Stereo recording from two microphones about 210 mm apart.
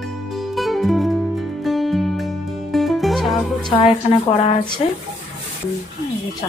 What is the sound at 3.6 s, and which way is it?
Speech, 25° left (ahead or behind).